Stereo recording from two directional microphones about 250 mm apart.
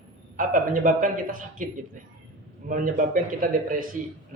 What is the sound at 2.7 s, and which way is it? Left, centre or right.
Speech, right.